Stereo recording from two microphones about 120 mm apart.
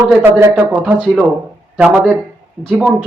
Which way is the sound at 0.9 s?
5° left (ahead or behind).